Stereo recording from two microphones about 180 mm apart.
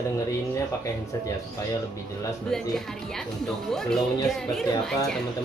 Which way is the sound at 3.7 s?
Centre (ahead or behind).